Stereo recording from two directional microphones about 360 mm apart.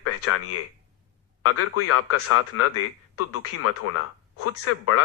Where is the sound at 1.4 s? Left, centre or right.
Left.